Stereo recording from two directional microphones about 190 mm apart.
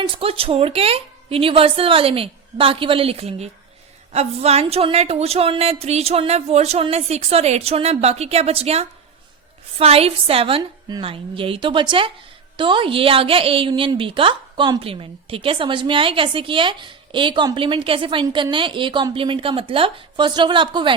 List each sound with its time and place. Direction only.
0.2 s a woman's voice: 30° right (ahead or behind)